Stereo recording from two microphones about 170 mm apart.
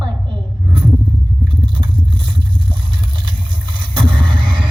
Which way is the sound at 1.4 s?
30° right (ahead or behind).